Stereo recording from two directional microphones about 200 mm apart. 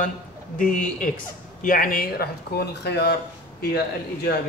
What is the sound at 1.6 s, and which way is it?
Speech, 45° left (ahead or behind).